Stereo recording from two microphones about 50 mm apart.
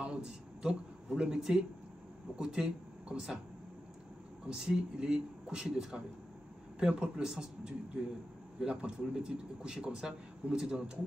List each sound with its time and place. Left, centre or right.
0.0 s speech: centre
4.5 s a man's voice: centre